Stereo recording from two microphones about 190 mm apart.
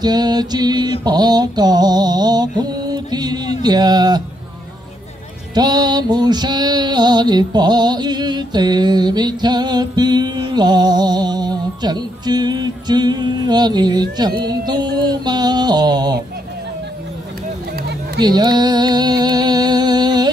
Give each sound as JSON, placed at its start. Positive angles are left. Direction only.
{"t": 0.0, "sound": "music", "side_deg": -20}
{"t": 1.0, "sound": "mantra", "side_deg": -20}
{"t": 5.5, "sound": "music", "side_deg": -20}
{"t": 18.2, "sound": "music", "side_deg": -20}